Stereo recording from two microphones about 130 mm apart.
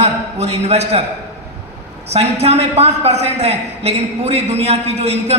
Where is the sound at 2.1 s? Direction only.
55° right (ahead or behind).